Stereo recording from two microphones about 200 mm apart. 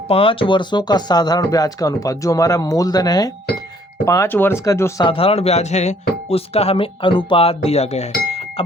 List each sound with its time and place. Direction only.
0.1 s speech: 25° left (ahead or behind)